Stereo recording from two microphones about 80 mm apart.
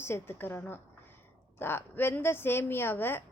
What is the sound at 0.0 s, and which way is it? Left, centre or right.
A woman's voice, left.